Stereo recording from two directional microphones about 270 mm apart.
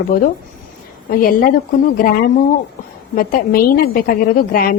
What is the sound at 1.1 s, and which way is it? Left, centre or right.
Speech, left.